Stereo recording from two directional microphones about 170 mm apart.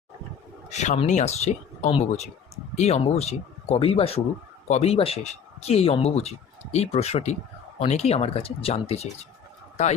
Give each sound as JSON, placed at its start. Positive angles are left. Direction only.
{"t": 0.7, "sound": "speech", "side_deg": 40}